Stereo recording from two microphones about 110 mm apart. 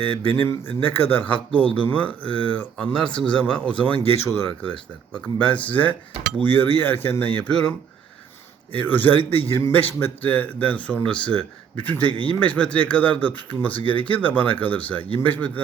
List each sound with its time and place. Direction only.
0.2 s cutlery: 20° left (ahead or behind)
8.7 s cutlery: 15° left (ahead or behind)
9.5 s a man's voice: 20° left (ahead or behind)
10.0 s cutlery: 15° left (ahead or behind)